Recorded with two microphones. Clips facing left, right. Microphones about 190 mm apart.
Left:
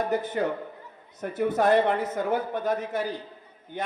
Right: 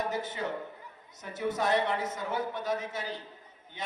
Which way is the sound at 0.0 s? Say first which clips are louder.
Left 7 dB; 60° left (ahead or behind).